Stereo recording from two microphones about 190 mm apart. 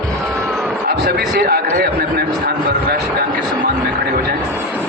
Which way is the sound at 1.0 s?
55° right (ahead or behind).